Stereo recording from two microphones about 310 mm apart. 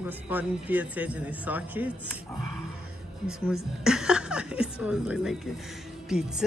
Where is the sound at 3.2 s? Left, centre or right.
Centre.